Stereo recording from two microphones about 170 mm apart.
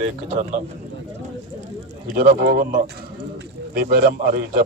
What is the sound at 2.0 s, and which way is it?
A man's voice, 65° right (ahead or behind).